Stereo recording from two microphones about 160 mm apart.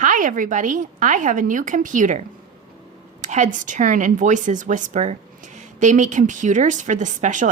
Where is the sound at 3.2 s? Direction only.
50° right (ahead or behind).